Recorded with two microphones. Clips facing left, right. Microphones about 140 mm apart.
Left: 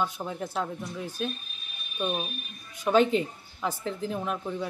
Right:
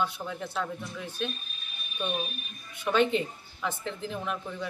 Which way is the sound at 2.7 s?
40° left (ahead or behind).